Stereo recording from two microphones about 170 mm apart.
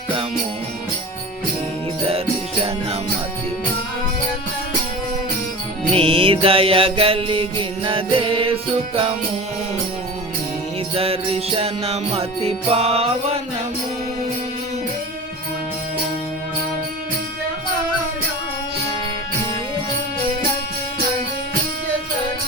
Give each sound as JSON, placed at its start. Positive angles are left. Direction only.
{"t": 5.9, "sound": "music", "side_deg": -35}
{"t": 10.9, "sound": "music", "side_deg": -35}